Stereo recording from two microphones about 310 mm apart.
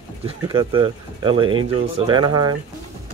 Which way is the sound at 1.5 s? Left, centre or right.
Right.